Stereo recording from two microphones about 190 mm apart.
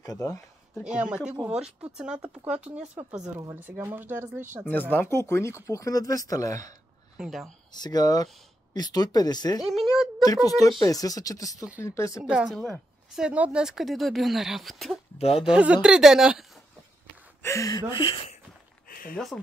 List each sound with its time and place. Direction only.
0.0 s speech: 20° left (ahead or behind)
0.8 s a woman's voice: 5° right (ahead or behind)
4.6 s speech: 10° left (ahead or behind)
7.2 s a woman's voice: centre (ahead or behind)
7.7 s speech: 20° left (ahead or behind)
9.6 s speech: centre (ahead or behind)
10.2 s speech: 20° left (ahead or behind)
12.2 s a woman's voice: 5° right (ahead or behind)
15.1 s speech: 30° left (ahead or behind)
15.4 s a woman's voice: 5° right (ahead or behind)
17.4 s speech: 15° left (ahead or behind)
17.9 s speech: 30° left (ahead or behind)
18.9 s a sound: 50° left (ahead or behind)
19.1 s a woman's voice: 5° left (ahead or behind)